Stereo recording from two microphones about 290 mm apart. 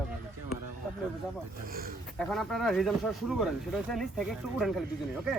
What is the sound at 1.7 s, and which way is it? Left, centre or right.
Speech, right.